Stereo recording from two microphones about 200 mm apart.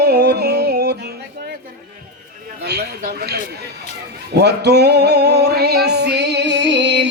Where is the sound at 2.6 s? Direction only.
55° right (ahead or behind).